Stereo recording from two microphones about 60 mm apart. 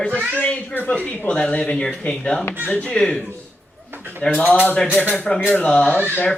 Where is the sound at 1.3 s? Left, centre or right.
Centre.